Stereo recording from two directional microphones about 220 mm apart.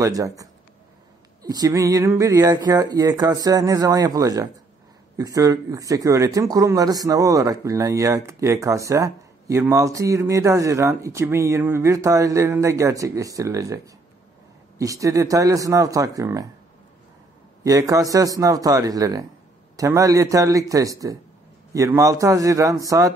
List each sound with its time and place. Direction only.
0.0 s speech: 15° right (ahead or behind)
14.8 s speech: 15° right (ahead or behind)
17.6 s speech: 15° right (ahead or behind)